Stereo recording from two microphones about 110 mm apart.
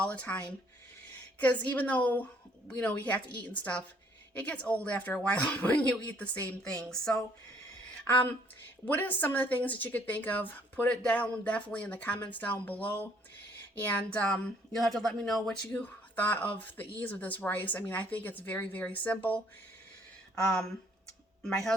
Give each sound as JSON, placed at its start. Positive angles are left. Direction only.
{"t": 0.0, "sound": "a woman's voice", "side_deg": 10}
{"t": 8.8, "sound": "a woman's voice", "side_deg": 15}
{"t": 15.7, "sound": "a woman's voice", "side_deg": 15}
{"t": 20.4, "sound": "a woman's voice", "side_deg": 10}